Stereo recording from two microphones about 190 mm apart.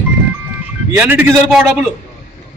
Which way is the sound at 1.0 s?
10° right (ahead or behind).